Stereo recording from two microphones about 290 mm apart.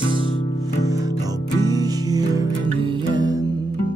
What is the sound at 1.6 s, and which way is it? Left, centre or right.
Music, centre.